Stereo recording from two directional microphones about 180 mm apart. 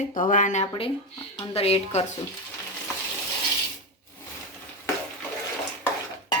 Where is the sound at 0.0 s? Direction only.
50° left (ahead or behind).